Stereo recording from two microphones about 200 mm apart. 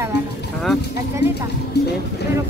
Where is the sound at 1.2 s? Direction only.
60° left (ahead or behind).